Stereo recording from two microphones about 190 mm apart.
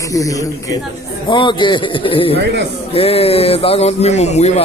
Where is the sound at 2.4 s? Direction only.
65° right (ahead or behind).